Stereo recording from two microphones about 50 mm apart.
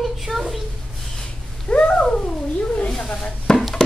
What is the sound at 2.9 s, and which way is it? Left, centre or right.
Speech, centre.